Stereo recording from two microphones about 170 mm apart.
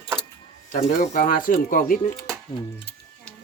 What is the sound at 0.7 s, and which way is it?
Speech, 45° left (ahead or behind).